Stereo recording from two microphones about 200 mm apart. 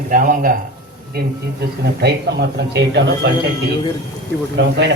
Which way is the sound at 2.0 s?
55° right (ahead or behind).